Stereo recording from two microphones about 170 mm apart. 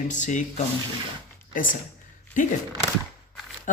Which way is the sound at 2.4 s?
50° left (ahead or behind).